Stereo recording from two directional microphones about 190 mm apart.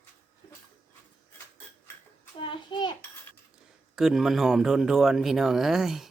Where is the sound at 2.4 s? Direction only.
25° left (ahead or behind).